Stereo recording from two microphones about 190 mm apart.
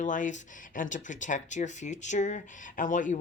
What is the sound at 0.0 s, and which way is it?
Speech, 40° left (ahead or behind).